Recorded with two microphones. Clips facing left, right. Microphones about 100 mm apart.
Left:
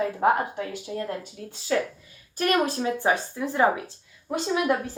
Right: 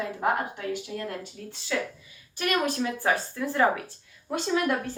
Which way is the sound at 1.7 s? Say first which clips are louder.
Left 5 dB; 45° left (ahead or behind).